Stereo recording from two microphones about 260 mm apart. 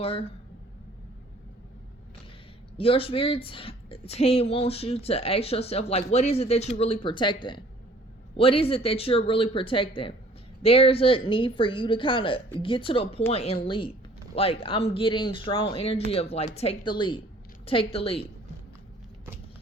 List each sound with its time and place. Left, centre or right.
0.0 s a woman's voice: left
2.7 s a woman's voice: left
8.4 s a woman's voice: left